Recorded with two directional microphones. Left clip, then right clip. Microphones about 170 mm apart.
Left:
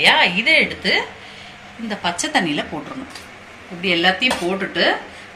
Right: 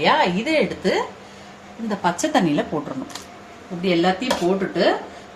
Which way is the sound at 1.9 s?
65° right (ahead or behind).